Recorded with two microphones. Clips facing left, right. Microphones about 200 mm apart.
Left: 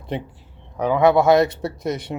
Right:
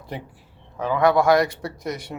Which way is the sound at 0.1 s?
25° left (ahead or behind).